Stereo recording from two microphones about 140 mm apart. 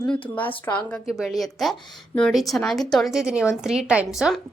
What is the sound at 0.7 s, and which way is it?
Speech, 20° left (ahead or behind).